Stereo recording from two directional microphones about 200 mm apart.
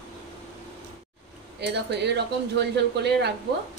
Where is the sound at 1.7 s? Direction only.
55° right (ahead or behind).